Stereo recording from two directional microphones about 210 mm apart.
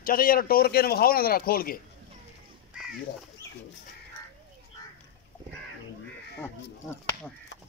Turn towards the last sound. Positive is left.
turn(degrees=10)  # may be behind; listen again after turning